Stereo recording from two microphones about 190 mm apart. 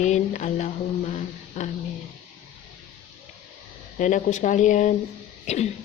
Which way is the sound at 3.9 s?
40° left (ahead or behind).